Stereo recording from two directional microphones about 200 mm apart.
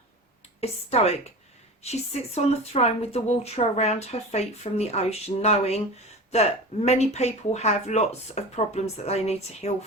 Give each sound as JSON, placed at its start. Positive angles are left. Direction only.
{"t": 0.6, "sound": "speech", "side_deg": 30}